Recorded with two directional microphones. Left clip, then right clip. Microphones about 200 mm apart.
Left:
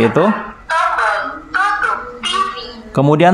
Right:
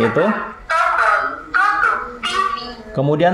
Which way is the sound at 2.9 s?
35° left (ahead or behind).